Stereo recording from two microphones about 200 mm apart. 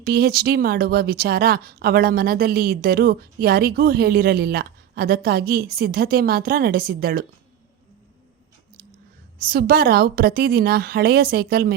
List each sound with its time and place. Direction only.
0.0 s speech: 50° right (ahead or behind)
9.5 s speech: 50° right (ahead or behind)